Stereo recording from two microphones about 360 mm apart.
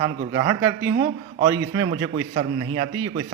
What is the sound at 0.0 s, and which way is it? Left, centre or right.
A man's voice, centre.